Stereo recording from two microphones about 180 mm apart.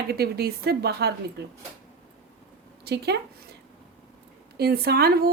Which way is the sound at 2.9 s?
65° right (ahead or behind).